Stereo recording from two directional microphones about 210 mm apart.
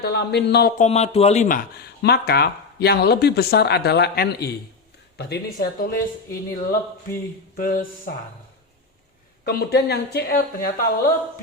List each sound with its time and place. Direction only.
0.0 s speech: 50° left (ahead or behind)
0.9 s speech: 30° left (ahead or behind)
9.4 s speech: 50° left (ahead or behind)